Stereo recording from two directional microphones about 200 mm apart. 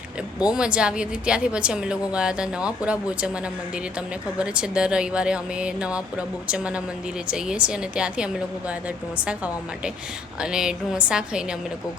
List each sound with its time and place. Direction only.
0.4 s a woman's voice: 5° right (ahead or behind)
4.4 s a woman's voice: 5° right (ahead or behind)